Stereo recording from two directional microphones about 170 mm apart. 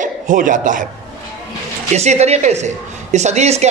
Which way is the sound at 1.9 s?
40° right (ahead or behind).